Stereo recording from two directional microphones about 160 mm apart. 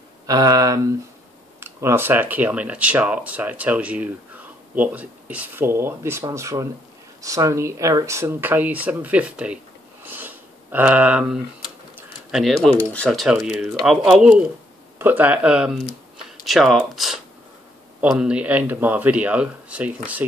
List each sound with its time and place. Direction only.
0.3 s speech: 25° right (ahead or behind); by 9.6 s 10° right (ahead or behind)
10.0 s sniff: 10° right (ahead or behind)
12.3 s speech: centre (ahead or behind)